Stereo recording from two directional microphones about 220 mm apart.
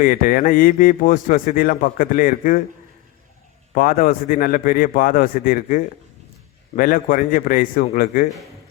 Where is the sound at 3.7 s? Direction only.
40° left (ahead or behind).